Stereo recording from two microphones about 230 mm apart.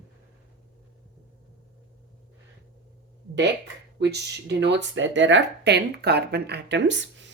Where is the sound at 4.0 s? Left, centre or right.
Right.